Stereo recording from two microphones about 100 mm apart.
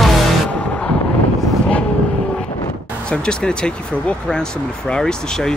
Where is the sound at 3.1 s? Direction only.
10° left (ahead or behind).